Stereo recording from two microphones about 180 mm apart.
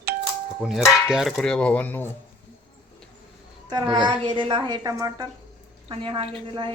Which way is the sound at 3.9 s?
25° right (ahead or behind).